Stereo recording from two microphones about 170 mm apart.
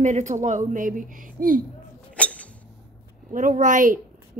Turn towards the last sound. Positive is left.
turn(degrees=-50)  # may be behind; listen again after turning